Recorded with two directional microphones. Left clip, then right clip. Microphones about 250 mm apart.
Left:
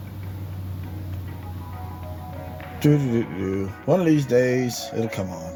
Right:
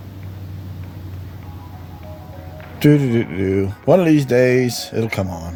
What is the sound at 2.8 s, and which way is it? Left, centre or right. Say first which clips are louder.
Speech: right 6 dB; right.